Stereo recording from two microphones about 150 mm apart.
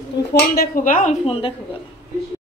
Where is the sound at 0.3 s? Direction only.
90° left; by 1.1 s 60° left (ahead or behind).